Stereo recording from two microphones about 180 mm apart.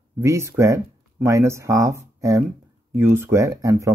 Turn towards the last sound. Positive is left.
turn(degrees=-15)  # may be behind; listen again after turning